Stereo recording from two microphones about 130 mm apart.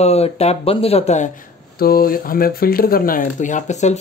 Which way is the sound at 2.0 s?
90° left.